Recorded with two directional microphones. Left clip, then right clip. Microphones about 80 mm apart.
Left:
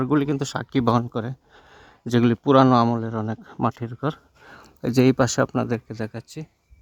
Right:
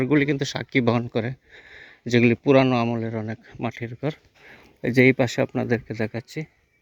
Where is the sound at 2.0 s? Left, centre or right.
Centre.